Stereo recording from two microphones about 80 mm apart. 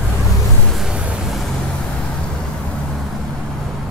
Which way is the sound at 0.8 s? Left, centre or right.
Centre.